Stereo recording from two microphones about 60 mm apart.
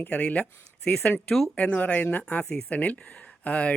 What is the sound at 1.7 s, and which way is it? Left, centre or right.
Speech, left.